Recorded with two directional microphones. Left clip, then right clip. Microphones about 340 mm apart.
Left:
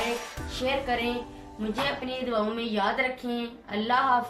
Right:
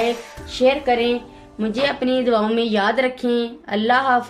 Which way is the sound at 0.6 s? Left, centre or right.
Right.